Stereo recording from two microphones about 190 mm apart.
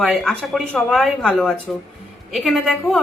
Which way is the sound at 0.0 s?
Centre (ahead or behind).